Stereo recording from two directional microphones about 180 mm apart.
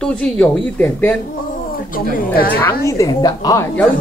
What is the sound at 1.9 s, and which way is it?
Speech, 50° left (ahead or behind).